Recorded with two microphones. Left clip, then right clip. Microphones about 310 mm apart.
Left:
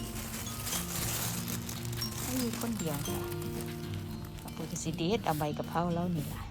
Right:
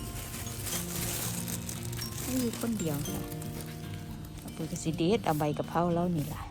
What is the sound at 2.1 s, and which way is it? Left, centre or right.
Music, left.